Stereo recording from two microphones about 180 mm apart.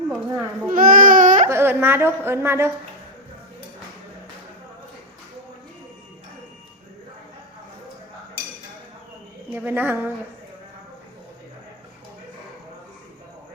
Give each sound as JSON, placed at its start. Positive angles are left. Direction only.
{"t": 0.1, "sound": "baby cry", "side_deg": -10}
{"t": 0.7, "sound": "baby cry", "side_deg": -50}
{"t": 1.5, "sound": "a woman's voice", "side_deg": -15}
{"t": 9.5, "sound": "speech", "side_deg": -10}